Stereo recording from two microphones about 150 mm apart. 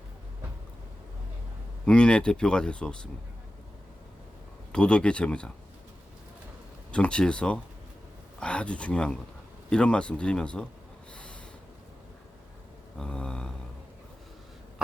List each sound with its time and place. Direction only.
1.8 s speech: 5° left (ahead or behind)
4.7 s speech: 5° left (ahead or behind)
6.9 s speech: 5° left (ahead or behind)
11.1 s snort: 5° left (ahead or behind)
13.0 s mantra: 5° left (ahead or behind)